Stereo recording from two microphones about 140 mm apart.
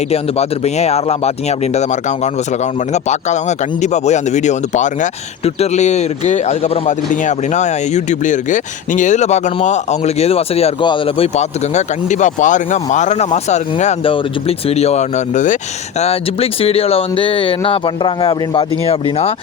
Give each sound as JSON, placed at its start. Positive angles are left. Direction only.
{"t": 0.1, "sound": "speech", "side_deg": 50}
{"t": 14.0, "sound": "speech", "side_deg": 45}
{"t": 16.0, "sound": "speech", "side_deg": 45}